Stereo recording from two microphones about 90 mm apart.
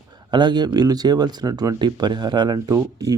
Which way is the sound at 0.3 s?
55° right (ahead or behind).